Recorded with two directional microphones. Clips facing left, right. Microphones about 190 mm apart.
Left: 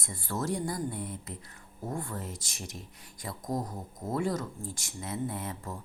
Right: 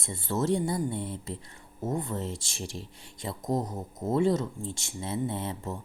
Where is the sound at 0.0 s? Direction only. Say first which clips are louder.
Right 5 dB; 25° right (ahead or behind).